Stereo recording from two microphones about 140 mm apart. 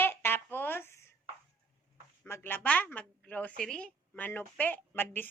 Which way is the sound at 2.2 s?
15° left (ahead or behind).